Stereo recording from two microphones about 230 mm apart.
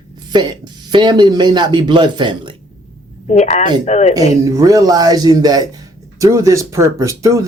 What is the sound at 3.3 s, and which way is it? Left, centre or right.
Speech, left.